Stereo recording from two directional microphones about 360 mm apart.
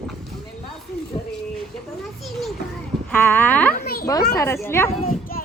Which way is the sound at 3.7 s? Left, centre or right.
Left.